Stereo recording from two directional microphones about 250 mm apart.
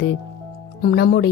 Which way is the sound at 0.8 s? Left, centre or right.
Left.